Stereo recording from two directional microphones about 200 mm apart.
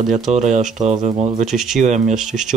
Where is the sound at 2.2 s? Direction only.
5° right (ahead or behind).